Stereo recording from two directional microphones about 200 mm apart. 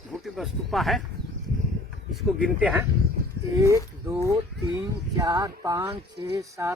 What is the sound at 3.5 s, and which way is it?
Speech, 15° right (ahead or behind).